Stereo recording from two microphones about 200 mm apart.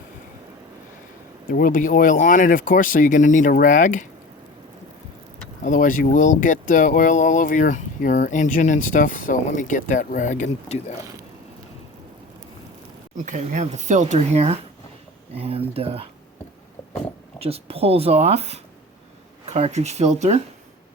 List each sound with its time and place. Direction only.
1.5 s speech: 45° left (ahead or behind)
5.6 s speech: 40° left (ahead or behind)
13.2 s speech: 40° right (ahead or behind)
17.4 s speech: 30° right (ahead or behind)